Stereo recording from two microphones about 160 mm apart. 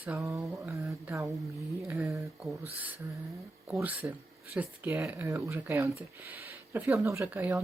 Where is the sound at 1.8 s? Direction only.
15° right (ahead or behind).